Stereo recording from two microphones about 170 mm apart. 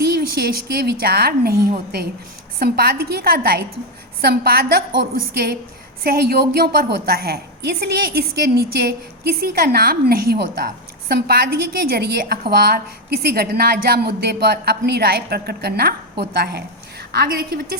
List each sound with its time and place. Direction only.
0.0 s a woman's voice: 70° right (ahead or behind)
2.6 s a woman's voice: 65° right (ahead or behind)